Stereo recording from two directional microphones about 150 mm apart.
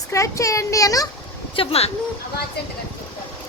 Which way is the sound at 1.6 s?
40° left (ahead or behind).